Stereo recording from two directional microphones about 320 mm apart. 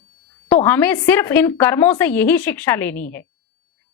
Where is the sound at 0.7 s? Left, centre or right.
Centre.